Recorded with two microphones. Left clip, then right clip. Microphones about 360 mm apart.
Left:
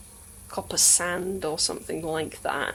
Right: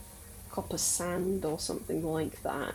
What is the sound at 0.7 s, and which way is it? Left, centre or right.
Speech, left.